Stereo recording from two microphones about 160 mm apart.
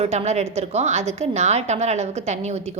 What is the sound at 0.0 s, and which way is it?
A woman's voice, 40° right (ahead or behind).